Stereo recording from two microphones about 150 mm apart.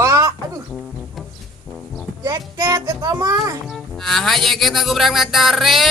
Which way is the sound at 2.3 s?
25° right (ahead or behind).